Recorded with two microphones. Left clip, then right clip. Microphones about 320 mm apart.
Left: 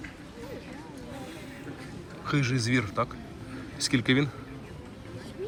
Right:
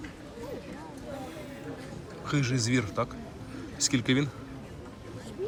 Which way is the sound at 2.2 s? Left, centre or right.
Centre.